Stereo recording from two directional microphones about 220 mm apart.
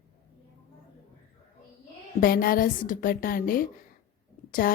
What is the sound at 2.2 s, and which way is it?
A woman's voice, 40° left (ahead or behind).